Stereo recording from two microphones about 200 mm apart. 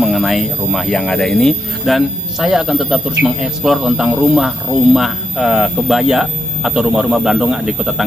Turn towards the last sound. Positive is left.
turn(degrees=0)  # may be behind; listen again after turning